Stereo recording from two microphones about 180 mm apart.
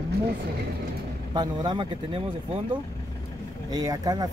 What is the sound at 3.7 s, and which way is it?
Speech, 20° right (ahead or behind).